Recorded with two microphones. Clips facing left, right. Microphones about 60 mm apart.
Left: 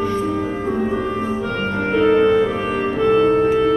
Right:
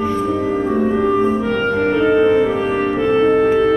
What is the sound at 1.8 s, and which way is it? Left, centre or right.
Music, centre.